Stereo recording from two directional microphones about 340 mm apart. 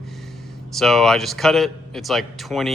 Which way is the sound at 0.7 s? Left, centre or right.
Centre.